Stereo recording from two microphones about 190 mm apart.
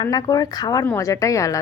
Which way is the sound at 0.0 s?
20° left (ahead or behind).